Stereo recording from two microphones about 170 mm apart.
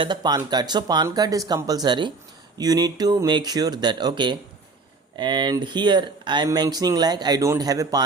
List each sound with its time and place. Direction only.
0.0 s speech: 25° right (ahead or behind)